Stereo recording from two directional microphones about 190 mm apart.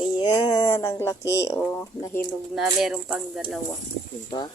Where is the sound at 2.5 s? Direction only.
Centre (ahead or behind).